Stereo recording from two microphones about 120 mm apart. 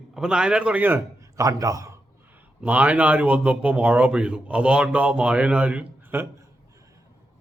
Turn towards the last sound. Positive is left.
turn(degrees=-20)  # may be behind; listen again after turning